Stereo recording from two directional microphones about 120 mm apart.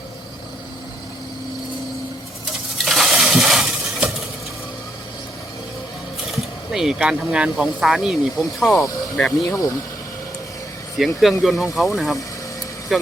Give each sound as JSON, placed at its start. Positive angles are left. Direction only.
{"t": 2.8, "sound": "coin", "side_deg": 0}
{"t": 6.3, "sound": "speech", "side_deg": -5}
{"t": 9.5, "sound": "speech", "side_deg": 25}
{"t": 10.9, "sound": "speech", "side_deg": 0}